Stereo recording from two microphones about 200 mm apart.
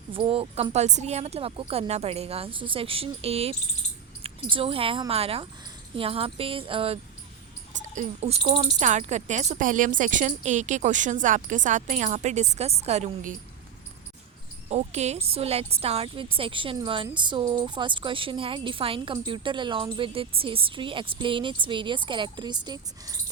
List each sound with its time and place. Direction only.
0.1 s a woman's voice: 25° right (ahead or behind)
14.7 s a woman's voice: 35° right (ahead or behind)